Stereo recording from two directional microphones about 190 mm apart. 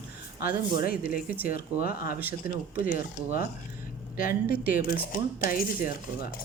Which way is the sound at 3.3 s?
50° left (ahead or behind).